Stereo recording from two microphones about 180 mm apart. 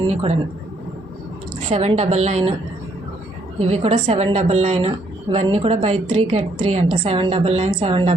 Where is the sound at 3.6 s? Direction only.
35° right (ahead or behind).